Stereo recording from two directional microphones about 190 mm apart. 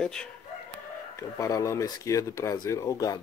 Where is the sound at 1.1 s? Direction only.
15° left (ahead or behind).